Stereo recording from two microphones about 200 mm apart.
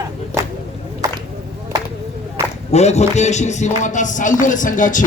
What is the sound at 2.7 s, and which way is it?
Speech, 35° left (ahead or behind).